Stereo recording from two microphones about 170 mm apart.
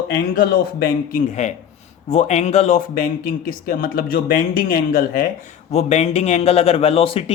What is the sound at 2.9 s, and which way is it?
Speech, 55° left (ahead or behind).